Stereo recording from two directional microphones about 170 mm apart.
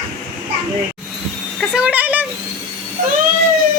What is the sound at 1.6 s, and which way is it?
Speech, 5° right (ahead or behind).